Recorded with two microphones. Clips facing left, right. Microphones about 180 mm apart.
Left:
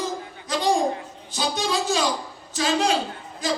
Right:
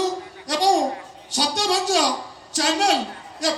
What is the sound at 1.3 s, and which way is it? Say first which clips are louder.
A man's voice: right 2 dB; 80° right.